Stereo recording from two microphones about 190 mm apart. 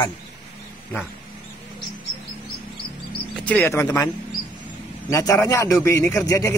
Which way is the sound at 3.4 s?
10° left (ahead or behind).